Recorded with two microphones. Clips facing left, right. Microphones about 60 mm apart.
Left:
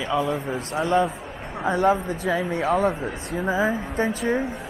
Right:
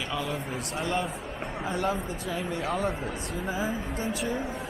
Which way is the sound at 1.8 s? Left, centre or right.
Left.